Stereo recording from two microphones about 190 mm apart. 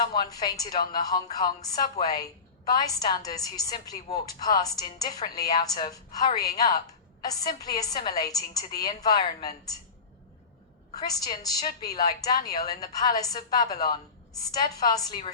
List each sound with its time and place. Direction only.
0.1 s a woman's voice: 20° left (ahead or behind)
11.0 s a woman's voice: 20° left (ahead or behind)